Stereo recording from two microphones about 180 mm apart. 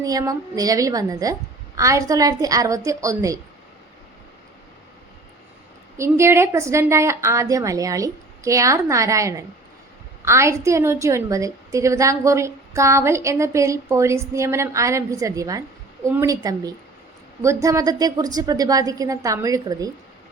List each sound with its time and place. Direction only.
0.0 s a woman's voice: 20° right (ahead or behind)
6.0 s a woman's voice: 15° right (ahead or behind)